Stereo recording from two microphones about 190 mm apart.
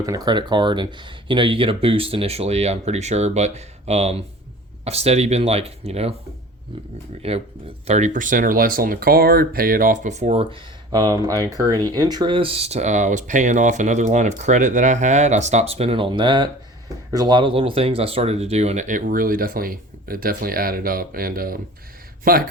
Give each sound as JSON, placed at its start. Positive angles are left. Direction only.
{"t": 0.0, "sound": "speech", "side_deg": -20}
{"t": 7.2, "sound": "speech", "side_deg": -30}